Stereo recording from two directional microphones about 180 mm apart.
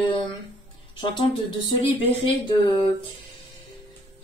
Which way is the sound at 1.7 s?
25° left (ahead or behind).